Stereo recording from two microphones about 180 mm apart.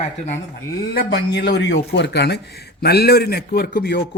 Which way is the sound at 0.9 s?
65° left (ahead or behind).